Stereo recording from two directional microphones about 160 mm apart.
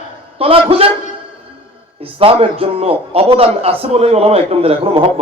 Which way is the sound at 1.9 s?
35° right (ahead or behind).